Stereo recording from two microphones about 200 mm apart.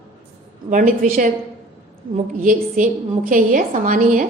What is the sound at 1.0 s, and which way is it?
Speech, 45° right (ahead or behind).